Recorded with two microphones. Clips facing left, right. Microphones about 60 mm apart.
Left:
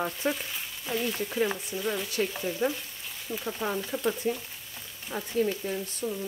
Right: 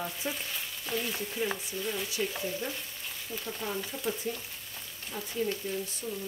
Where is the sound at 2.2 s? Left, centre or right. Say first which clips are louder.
Left 4 dB; left.